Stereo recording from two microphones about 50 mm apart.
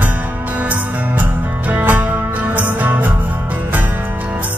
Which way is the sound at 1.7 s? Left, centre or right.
Right.